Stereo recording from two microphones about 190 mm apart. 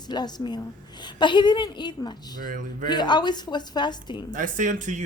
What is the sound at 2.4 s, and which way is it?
Speech, 45° right (ahead or behind).